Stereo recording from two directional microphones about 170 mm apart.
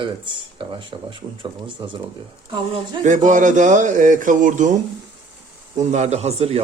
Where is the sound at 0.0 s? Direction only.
30° right (ahead or behind).